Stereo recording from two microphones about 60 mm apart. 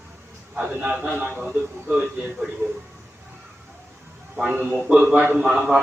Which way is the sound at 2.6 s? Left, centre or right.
Right.